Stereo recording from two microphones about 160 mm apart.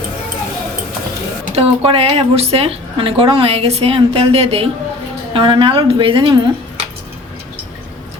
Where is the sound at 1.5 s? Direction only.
40° right (ahead or behind).